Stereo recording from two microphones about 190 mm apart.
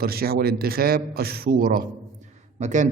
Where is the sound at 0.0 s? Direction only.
55° right (ahead or behind).